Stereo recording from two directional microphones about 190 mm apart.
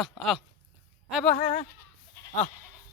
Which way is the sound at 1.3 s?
35° left (ahead or behind).